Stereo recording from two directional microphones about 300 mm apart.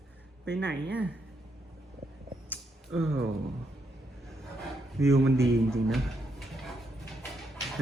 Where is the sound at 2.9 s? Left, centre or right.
Right.